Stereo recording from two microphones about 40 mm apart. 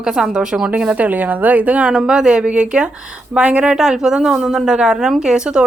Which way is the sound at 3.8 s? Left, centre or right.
Centre.